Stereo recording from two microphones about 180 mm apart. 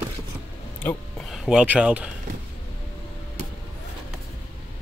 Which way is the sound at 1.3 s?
5° right (ahead or behind).